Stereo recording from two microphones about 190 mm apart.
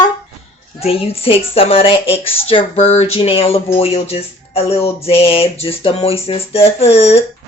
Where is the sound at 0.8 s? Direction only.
30° left (ahead or behind).